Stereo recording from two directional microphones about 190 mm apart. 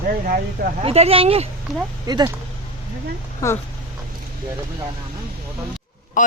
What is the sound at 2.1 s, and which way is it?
Speech, 20° right (ahead or behind).